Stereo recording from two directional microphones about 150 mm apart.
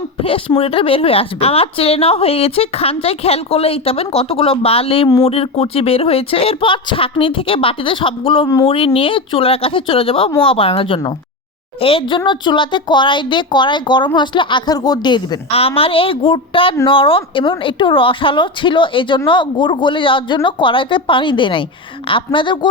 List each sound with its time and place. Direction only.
0.2 s a woman's voice: 40° left (ahead or behind)
15.5 s a woman's voice: 40° left (ahead or behind)